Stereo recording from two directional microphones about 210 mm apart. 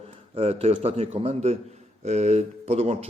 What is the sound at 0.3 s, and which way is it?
A man's voice, 30° right (ahead or behind).